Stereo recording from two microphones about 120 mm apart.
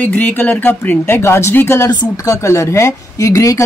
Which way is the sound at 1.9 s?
30° left (ahead or behind).